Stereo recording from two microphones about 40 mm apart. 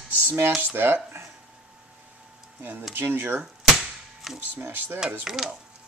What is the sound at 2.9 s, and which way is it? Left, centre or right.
Speech, right.